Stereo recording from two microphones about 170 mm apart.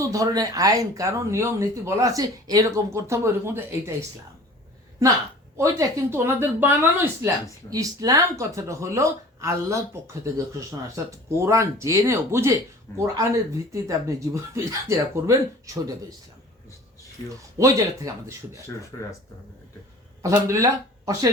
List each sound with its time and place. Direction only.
0.1 s speech: 20° right (ahead or behind)
5.5 s speech: 15° right (ahead or behind)
13.8 s speech: 20° right (ahead or behind)
17.2 s speech: 20° right (ahead or behind)
20.2 s speech: 15° right (ahead or behind)